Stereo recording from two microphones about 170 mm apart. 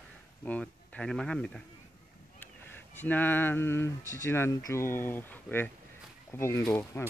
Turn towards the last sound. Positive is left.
turn(degrees=10)  # may be behind; listen again after turning